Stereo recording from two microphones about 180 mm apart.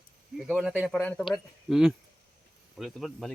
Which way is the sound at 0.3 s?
Centre (ahead or behind).